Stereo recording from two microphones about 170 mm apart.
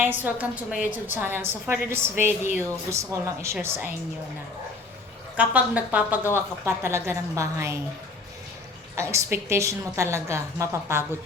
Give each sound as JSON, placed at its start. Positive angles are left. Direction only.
{"t": 0.0, "sound": "a woman's voice", "side_deg": -10}
{"t": 5.4, "sound": "a woman's voice", "side_deg": -10}
{"t": 9.0, "sound": "a woman's voice", "side_deg": -15}